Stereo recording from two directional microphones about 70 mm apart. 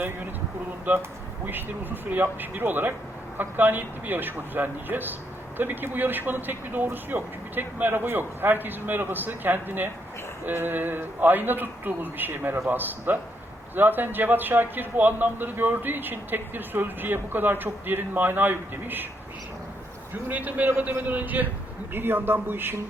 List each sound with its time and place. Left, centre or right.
0.9 s a man's voice: right
20.2 s a man's voice: right